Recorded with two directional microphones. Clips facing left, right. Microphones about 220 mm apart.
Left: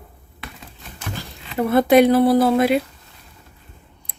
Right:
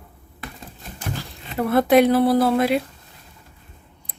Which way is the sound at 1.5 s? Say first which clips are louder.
Left 2 dB; centre (ahead or behind).